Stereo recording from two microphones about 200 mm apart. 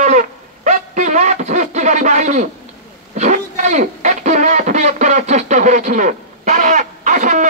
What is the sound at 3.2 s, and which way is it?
Speech, 35° right (ahead or behind).